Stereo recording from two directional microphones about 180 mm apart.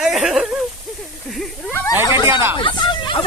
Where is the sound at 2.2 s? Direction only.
15° right (ahead or behind).